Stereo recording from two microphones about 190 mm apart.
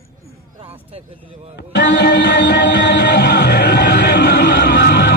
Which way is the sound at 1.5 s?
60° left (ahead or behind).